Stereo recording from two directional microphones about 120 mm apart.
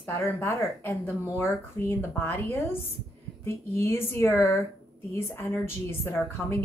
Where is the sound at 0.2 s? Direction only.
20° left (ahead or behind).